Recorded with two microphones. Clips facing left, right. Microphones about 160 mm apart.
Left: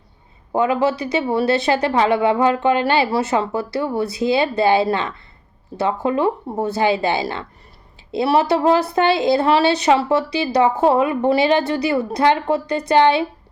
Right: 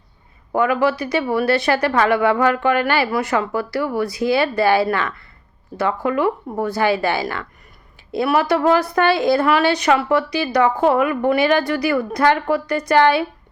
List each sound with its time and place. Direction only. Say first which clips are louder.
0.5 s a woman's voice: even; 20° left (ahead or behind)